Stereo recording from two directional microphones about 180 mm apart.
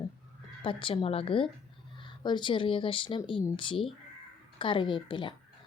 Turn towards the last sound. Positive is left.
turn(degrees=25)  # may be behind; listen again after turning